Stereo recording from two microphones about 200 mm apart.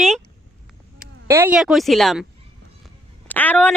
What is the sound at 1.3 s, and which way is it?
Speech, 15° right (ahead or behind).